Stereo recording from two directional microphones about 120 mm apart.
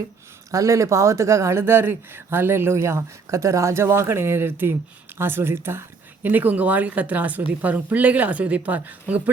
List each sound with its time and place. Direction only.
0.5 s speech: 25° right (ahead or behind)